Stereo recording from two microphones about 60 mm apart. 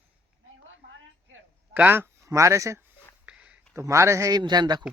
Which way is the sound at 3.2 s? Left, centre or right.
Centre.